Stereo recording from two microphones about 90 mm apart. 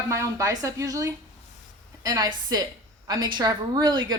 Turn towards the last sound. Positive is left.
turn(degrees=-55)  # may be behind; listen again after turning